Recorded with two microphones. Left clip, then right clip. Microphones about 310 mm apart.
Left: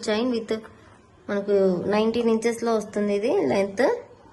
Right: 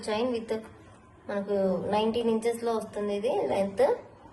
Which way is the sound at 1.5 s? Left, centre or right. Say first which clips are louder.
Left 6 dB; left.